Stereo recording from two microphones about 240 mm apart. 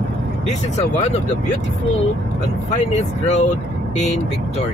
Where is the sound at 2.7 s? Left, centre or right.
Left.